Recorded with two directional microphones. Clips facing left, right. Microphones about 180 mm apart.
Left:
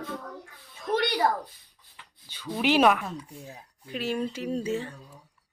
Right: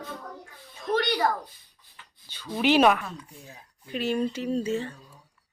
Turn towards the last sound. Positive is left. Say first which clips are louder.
# right 2 dB
turn(degrees=10)  # may be behind; listen again after turning